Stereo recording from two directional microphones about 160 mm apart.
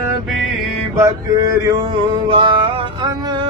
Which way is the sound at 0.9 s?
20° right (ahead or behind).